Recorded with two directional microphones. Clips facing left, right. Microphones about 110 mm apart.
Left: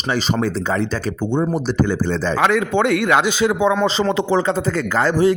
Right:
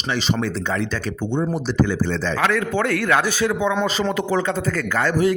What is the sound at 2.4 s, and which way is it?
A man's voice, 20° left (ahead or behind).